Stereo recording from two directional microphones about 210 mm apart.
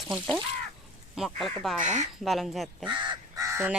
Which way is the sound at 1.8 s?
35° right (ahead or behind).